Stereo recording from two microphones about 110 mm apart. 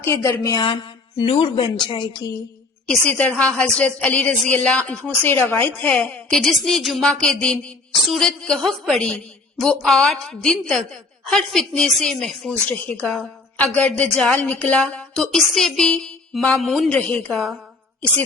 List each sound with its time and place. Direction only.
0.0 s a woman's voice: 25° left (ahead or behind)
1.2 s speech: 55° left (ahead or behind)
2.2 s a sound: 40° left (ahead or behind)
2.9 s a woman's voice: 10° left (ahead or behind)